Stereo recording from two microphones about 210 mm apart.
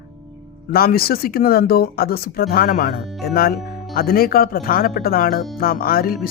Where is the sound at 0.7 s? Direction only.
45° left (ahead or behind).